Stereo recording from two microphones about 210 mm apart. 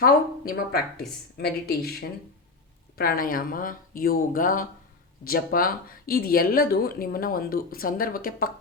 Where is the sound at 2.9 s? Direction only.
45° left (ahead or behind).